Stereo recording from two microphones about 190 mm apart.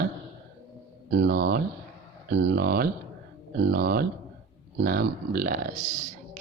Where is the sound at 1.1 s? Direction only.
60° right (ahead or behind).